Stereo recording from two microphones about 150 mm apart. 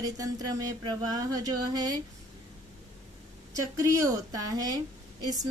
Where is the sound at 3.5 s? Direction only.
20° right (ahead or behind).